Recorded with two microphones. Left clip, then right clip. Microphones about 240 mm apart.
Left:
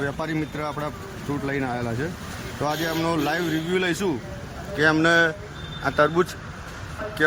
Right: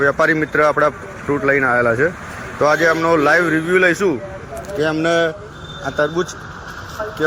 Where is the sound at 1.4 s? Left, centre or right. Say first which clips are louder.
Right 14 dB; centre.